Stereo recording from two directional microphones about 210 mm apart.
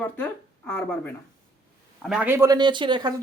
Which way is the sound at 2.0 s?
5° right (ahead or behind).